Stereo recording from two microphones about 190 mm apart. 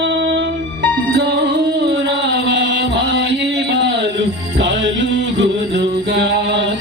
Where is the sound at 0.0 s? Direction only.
65° right (ahead or behind).